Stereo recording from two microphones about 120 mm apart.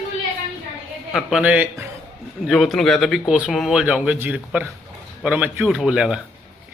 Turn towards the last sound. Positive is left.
turn(degrees=-5)  # may be behind; listen again after turning